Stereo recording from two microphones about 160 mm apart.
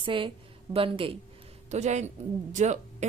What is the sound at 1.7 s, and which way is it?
A woman's voice, 45° right (ahead or behind).